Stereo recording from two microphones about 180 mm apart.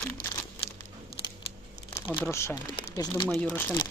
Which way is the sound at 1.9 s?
10° left (ahead or behind).